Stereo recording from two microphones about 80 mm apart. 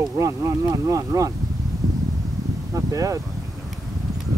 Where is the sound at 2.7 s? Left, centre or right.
Right.